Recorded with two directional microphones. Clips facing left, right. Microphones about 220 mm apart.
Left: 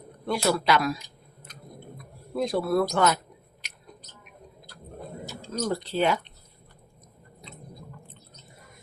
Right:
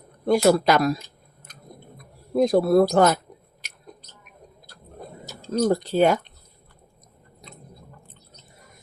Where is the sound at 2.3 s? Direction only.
40° right (ahead or behind).